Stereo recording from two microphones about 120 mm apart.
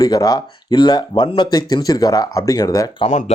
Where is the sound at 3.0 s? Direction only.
80° left.